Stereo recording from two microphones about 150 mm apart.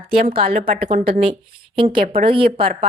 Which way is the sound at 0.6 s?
70° right (ahead or behind).